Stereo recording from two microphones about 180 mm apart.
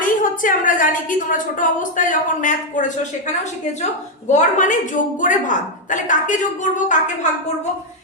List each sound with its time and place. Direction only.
0.0 s a woman's voice: 50° left (ahead or behind)
4.3 s a woman's voice: 45° left (ahead or behind)